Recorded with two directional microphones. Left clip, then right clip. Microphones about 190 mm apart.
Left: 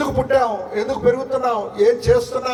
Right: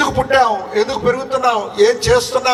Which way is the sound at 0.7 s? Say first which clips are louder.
Right 2 dB; 15° left (ahead or behind).